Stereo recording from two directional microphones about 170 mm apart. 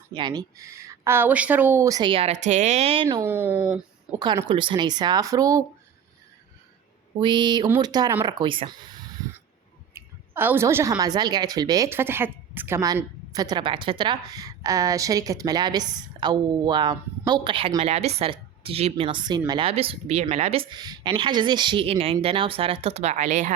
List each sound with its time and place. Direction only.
0.1 s a woman's voice: 25° right (ahead or behind)
3.1 s speech: 15° right (ahead or behind)
4.4 s a woman's voice: 30° right (ahead or behind)
7.2 s a woman's voice: 25° right (ahead or behind)
9.9 s a woman's voice: 10° right (ahead or behind); by 23.6 s 45° right (ahead or behind)